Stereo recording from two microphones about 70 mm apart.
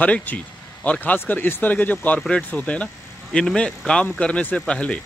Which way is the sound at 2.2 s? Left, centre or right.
Centre.